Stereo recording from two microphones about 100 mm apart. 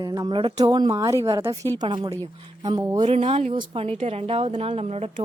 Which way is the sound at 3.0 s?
80° right.